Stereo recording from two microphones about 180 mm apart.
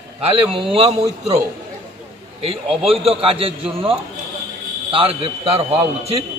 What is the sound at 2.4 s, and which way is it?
A man's voice, 30° right (ahead or behind).